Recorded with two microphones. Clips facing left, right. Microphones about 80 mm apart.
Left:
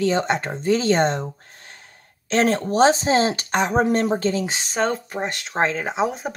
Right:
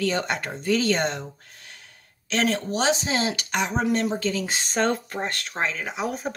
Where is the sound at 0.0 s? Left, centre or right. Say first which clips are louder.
Left 5 dB; left.